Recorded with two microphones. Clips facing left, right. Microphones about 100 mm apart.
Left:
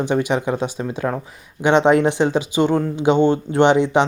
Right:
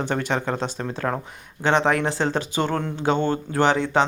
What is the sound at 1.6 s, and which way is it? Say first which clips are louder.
Speech: left 6 dB; 20° left (ahead or behind).